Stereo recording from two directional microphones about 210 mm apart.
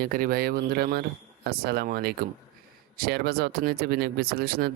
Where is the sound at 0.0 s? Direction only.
45° right (ahead or behind).